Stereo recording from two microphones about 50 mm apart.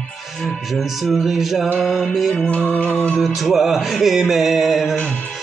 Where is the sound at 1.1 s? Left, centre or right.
Centre.